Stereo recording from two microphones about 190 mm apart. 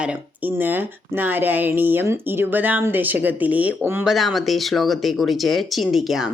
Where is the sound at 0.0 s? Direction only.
5° right (ahead or behind).